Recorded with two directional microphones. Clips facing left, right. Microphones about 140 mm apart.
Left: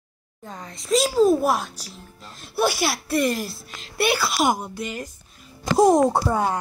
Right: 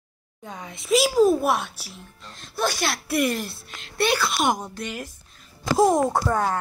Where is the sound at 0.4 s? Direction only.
Centre (ahead or behind).